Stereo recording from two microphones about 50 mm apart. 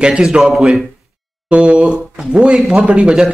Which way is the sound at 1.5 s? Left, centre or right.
Right.